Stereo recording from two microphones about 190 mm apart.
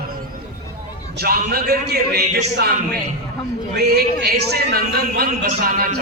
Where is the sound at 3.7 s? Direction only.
55° right (ahead or behind).